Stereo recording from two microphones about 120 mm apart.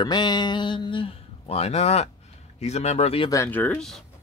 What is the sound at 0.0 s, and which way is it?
Speech, 35° left (ahead or behind).